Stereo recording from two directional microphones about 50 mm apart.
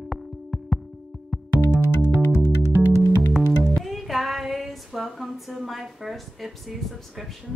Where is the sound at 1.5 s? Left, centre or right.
Left.